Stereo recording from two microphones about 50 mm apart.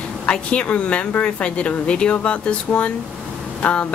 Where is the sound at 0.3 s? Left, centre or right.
Left.